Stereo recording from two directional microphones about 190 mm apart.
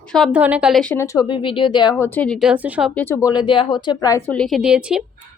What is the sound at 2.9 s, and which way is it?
Speech, 10° left (ahead or behind).